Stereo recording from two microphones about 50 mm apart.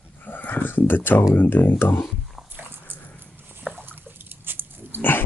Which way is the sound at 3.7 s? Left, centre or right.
Centre.